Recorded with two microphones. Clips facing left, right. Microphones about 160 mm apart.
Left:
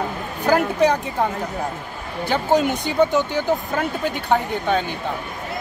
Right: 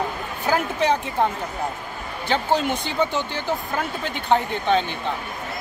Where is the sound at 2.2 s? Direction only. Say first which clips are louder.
Left 3 dB; 10° left (ahead or behind).